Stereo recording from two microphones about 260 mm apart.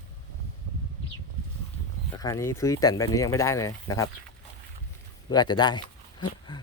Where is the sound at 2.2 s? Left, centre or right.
Centre.